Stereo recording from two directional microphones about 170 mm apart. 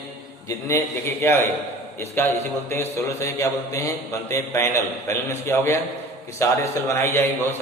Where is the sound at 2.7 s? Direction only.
15° left (ahead or behind).